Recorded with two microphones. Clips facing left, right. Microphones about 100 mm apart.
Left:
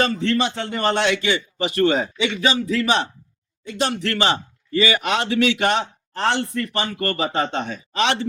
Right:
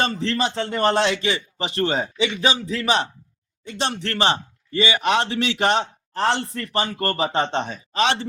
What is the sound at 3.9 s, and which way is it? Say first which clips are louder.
A man's voice: right 1 dB; 30° right (ahead or behind).